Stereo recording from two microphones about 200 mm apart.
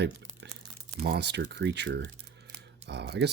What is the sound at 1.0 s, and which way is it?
Speech, 55° right (ahead or behind).